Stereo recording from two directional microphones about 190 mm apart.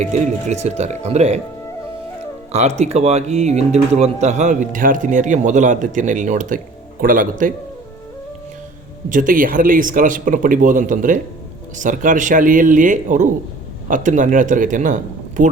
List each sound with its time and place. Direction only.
0.0 s speech: 35° right (ahead or behind)
2.5 s speech: 35° right (ahead or behind)
9.0 s speech: 45° right (ahead or behind)